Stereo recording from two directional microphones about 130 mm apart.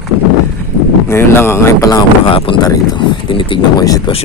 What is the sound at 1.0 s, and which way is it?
Speech, 20° left (ahead or behind).